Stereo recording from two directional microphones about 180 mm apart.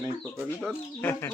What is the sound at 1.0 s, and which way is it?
Speech, 10° left (ahead or behind).